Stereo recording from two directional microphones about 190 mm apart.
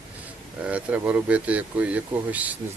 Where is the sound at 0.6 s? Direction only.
5° right (ahead or behind).